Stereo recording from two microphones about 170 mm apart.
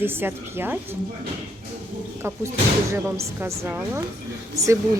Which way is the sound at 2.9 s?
15° right (ahead or behind).